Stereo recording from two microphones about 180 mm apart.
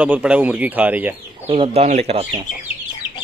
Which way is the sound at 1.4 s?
30° right (ahead or behind).